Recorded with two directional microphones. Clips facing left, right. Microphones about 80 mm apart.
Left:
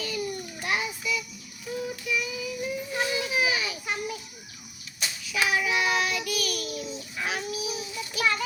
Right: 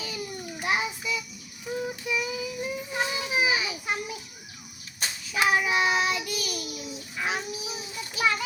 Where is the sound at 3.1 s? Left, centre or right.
Right.